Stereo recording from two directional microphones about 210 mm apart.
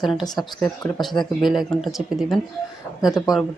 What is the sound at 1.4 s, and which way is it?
Speech, centre (ahead or behind).